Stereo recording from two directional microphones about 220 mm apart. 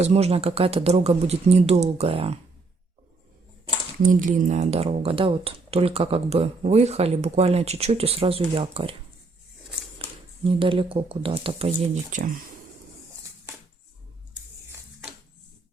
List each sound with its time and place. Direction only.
0.0 s speech: 30° right (ahead or behind)
4.0 s speech: 35° right (ahead or behind)
10.4 s speech: 25° right (ahead or behind)
12.1 s speech: 35° right (ahead or behind)